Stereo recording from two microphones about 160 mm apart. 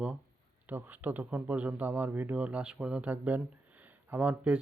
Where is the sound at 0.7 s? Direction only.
10° right (ahead or behind).